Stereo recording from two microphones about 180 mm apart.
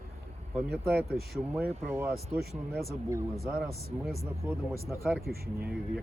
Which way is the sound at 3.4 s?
10° right (ahead or behind).